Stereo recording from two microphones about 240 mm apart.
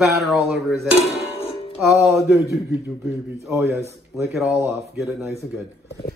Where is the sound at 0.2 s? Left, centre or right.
Centre.